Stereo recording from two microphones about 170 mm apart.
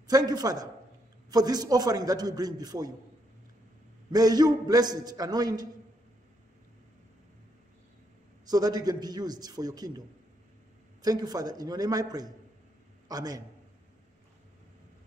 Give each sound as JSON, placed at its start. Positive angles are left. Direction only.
{"t": 0.0, "sound": "a man's voice", "side_deg": -25}
{"t": 4.1, "sound": "a man's voice", "side_deg": -25}
{"t": 8.5, "sound": "a man's voice", "side_deg": -20}